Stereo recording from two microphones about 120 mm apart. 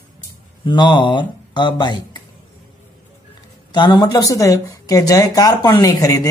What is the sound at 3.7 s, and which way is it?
Speech, 35° left (ahead or behind).